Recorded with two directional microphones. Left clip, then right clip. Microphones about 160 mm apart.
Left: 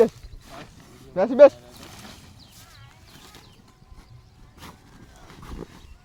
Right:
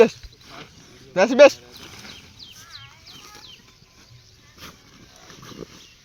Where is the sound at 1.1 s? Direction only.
20° right (ahead or behind).